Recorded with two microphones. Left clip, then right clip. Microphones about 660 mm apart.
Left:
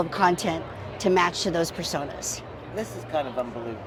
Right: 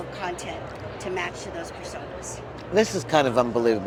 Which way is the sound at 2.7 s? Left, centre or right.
Right.